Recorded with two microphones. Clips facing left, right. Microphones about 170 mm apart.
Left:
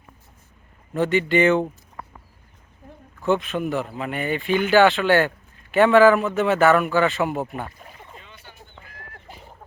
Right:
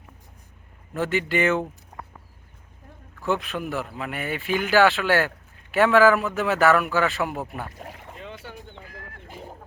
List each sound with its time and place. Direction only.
0.9 s speech: centre (ahead or behind)
3.2 s speech: centre (ahead or behind)
7.8 s boat: 75° right (ahead or behind)